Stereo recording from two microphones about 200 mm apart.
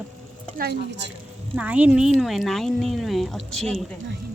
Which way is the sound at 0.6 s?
50° right (ahead or behind).